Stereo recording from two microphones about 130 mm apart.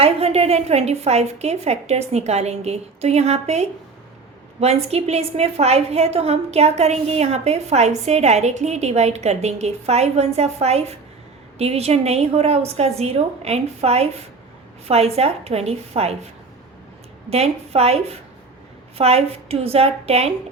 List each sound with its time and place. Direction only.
0.0 s a woman's voice: 50° right (ahead or behind)
17.2 s a woman's voice: 50° right (ahead or behind)